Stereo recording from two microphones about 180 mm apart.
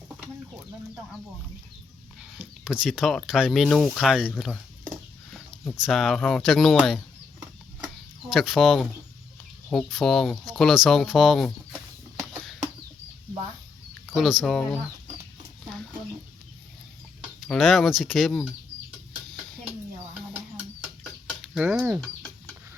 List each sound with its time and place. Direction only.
2.2 s speech: 5° right (ahead or behind)
8.3 s speech: centre (ahead or behind)
14.1 s speech: centre (ahead or behind)
17.5 s speech: centre (ahead or behind)
21.0 s chicken: 5° right (ahead or behind)